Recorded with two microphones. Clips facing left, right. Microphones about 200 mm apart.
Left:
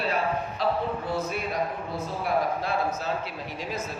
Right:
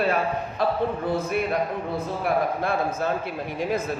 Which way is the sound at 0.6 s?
50° right (ahead or behind).